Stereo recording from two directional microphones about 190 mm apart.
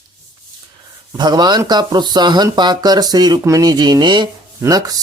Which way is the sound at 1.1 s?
20° right (ahead or behind).